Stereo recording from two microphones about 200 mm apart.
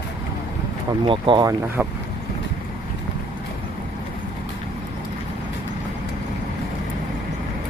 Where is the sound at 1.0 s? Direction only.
25° right (ahead or behind).